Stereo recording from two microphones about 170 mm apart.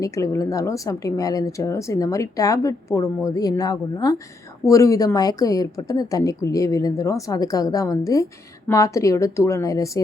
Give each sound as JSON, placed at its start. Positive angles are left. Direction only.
{"t": 0.0, "sound": "speech", "side_deg": 20}